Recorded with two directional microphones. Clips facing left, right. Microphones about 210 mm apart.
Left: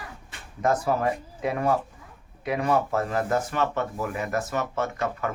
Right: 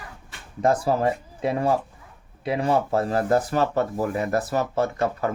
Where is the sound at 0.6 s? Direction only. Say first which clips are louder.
Right 3 dB; 30° right (ahead or behind).